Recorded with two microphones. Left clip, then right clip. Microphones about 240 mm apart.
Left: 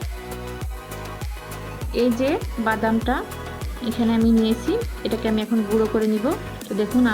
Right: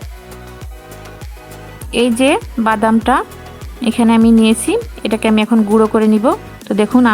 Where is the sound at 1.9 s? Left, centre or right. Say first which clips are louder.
Right 8 dB; right.